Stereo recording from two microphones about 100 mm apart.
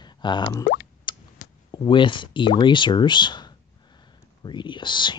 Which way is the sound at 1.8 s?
55° left (ahead or behind).